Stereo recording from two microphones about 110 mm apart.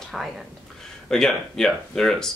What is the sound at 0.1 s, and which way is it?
Speech, centre (ahead or behind).